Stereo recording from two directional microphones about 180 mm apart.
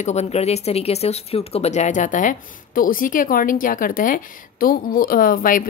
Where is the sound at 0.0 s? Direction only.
35° left (ahead or behind).